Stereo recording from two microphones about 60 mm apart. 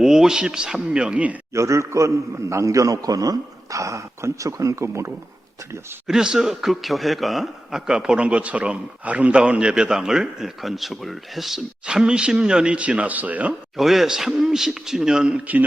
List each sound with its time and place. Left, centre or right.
0.0 s a man's voice: centre
1.5 s a man's voice: right
6.1 s speech: centre
7.8 s a man's voice: centre
11.9 s a man's voice: centre
13.5 s a man's voice: centre